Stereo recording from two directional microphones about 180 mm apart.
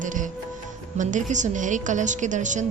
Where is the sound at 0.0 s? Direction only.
45° right (ahead or behind).